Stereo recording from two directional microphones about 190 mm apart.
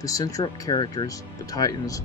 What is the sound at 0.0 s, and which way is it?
Speech, 20° left (ahead or behind).